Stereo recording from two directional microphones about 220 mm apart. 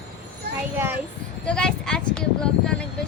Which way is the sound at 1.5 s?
5° left (ahead or behind).